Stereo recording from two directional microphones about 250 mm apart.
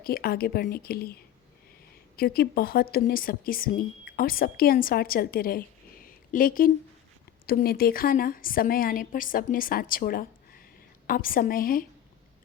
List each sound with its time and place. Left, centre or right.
0.0 s speech: left
2.1 s speech: left
6.1 s a sound: left
7.4 s speech: left